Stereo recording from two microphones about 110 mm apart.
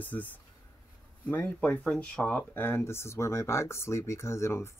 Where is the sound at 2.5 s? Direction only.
20° left (ahead or behind).